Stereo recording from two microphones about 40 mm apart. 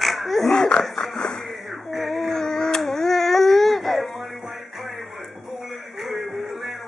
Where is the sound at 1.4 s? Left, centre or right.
Centre.